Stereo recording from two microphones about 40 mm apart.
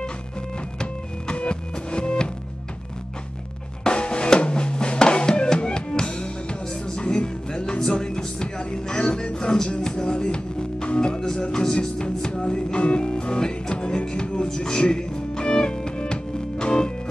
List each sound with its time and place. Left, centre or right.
0.7 s music: left
3.8 s drum: left
11.5 s music: centre